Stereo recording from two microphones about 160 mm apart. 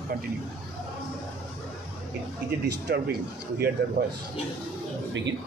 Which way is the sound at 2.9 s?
90° right.